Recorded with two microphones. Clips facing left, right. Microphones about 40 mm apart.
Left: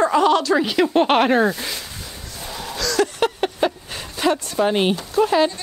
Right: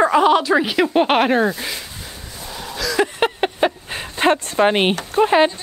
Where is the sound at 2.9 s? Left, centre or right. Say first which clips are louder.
Right 1 dB; right.